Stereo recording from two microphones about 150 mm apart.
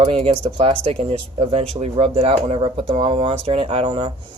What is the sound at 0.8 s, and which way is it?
Speech, 50° right (ahead or behind).